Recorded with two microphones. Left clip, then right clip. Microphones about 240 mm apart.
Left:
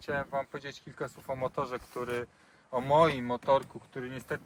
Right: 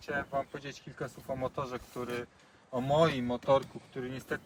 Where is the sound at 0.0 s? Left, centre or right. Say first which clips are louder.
Left 1 dB; centre.